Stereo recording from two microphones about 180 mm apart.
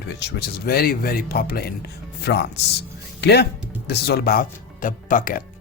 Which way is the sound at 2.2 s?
70° left (ahead or behind).